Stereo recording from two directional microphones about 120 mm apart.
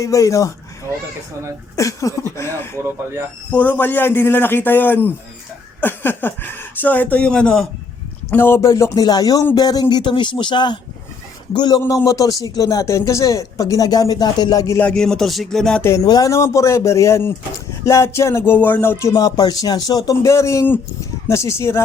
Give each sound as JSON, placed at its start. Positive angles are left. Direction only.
{"t": 0.0, "sound": "speech", "side_deg": 25}
{"t": 1.7, "sound": "speech", "side_deg": 25}
{"t": 2.8, "sound": "speech", "side_deg": -20}
{"t": 3.5, "sound": "speech", "side_deg": 15}
{"t": 8.3, "sound": "speech", "side_deg": 20}
{"t": 14.8, "sound": "music", "side_deg": 5}
{"t": 15.8, "sound": "speech", "side_deg": 25}
{"t": 19.1, "sound": "speech", "side_deg": 30}